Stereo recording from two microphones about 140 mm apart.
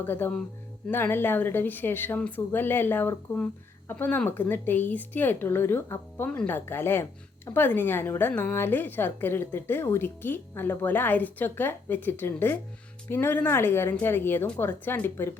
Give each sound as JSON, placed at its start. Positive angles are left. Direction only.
{"t": 0.0, "sound": "speech", "side_deg": 15}